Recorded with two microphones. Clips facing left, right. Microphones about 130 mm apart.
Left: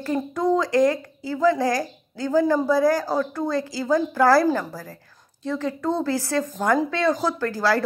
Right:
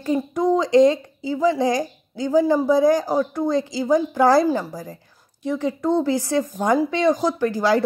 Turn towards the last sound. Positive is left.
turn(degrees=-15)  # may be behind; listen again after turning